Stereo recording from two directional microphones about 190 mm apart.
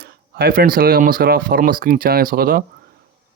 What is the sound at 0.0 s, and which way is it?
Speech, 55° right (ahead or behind).